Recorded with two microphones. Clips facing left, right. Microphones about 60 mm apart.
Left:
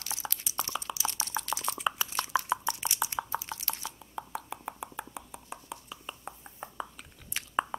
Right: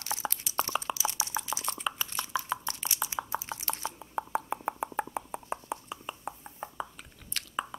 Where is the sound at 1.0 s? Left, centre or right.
Centre.